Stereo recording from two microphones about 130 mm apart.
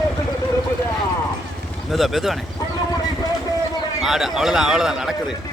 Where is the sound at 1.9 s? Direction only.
Centre (ahead or behind).